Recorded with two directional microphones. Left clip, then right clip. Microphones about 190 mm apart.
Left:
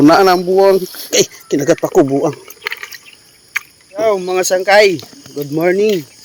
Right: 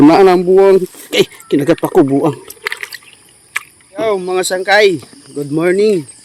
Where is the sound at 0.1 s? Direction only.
30° right (ahead or behind).